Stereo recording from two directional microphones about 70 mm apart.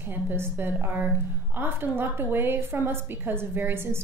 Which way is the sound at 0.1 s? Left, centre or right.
Right.